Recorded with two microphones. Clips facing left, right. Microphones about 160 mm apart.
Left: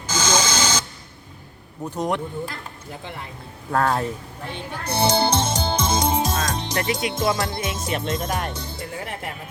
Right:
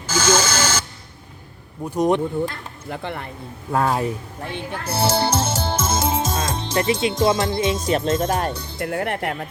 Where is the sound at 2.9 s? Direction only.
60° right (ahead or behind).